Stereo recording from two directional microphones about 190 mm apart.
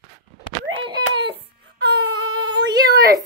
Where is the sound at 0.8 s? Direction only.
25° right (ahead or behind).